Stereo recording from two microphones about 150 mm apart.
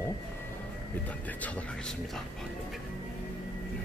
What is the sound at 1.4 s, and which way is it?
Speech, 10° left (ahead or behind).